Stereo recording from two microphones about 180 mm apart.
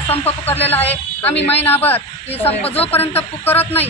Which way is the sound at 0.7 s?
10° left (ahead or behind).